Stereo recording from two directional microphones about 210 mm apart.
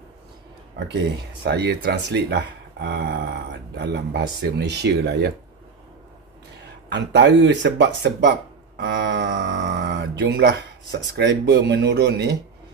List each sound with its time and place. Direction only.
1.4 s speech: 50° right (ahead or behind)
6.9 s speech: 55° right (ahead or behind)